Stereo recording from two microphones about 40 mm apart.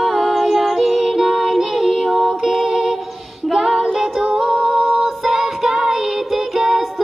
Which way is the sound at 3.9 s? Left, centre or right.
Centre.